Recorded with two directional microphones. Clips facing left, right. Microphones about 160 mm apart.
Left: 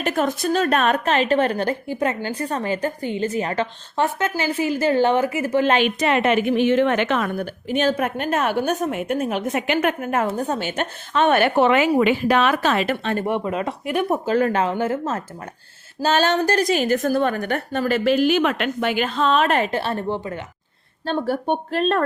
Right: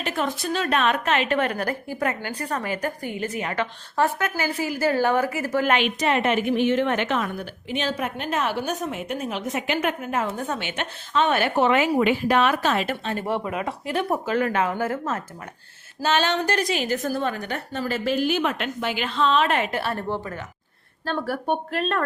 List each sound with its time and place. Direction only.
0.0 s a woman's voice: 45° left (ahead or behind); by 5.7 s 20° left (ahead or behind)
5.8 s a woman's voice: 75° left (ahead or behind)
7.3 s a woman's voice: 50° left (ahead or behind)
10.3 s speech: 35° left (ahead or behind)
11.1 s a woman's voice: 55° left (ahead or behind); by 13.1 s 75° left (ahead or behind)
13.2 s a woman's voice: 20° left (ahead or behind)
14.3 s speech: 35° left (ahead or behind)
16.0 s a woman's voice: 40° left (ahead or behind)